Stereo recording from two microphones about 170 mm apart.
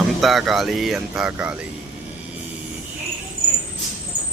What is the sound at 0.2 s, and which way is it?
Speech, centre (ahead or behind).